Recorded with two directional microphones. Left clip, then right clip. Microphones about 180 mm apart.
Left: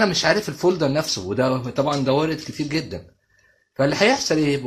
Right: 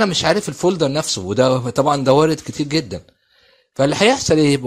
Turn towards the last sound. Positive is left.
turn(degrees=-45)  # may be behind; listen again after turning